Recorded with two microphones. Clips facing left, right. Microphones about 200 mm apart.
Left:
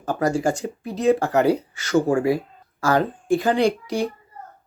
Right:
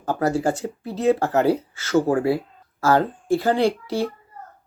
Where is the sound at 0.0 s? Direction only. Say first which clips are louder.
Even; 15° left (ahead or behind).